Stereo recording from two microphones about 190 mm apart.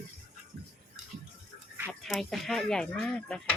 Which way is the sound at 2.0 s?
Centre (ahead or behind).